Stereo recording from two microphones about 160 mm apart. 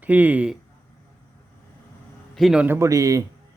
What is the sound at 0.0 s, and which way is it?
Speech, 10° right (ahead or behind).